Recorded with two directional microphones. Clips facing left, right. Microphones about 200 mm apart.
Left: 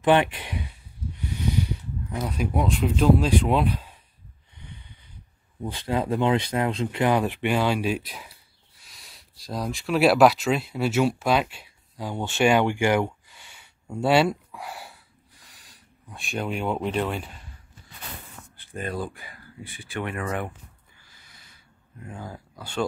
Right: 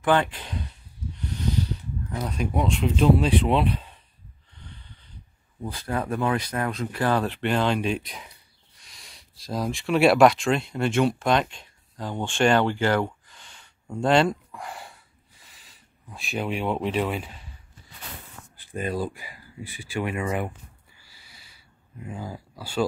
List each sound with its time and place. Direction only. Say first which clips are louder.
0.0 s speech: left 2 dB; 20° left (ahead or behind)
2.0 s speech: left 1 dB; 5° left (ahead or behind)
4.6 s a sound: left 2 dB; 15° left (ahead or behind)
5.7 s speech: left 3 dB; 20° left (ahead or behind); by 17.3 s 5° right (ahead or behind)
18.7 s speech: right 3 dB; 15° right (ahead or behind)
21.0 s a sound: right 1 dB; 10° right (ahead or behind)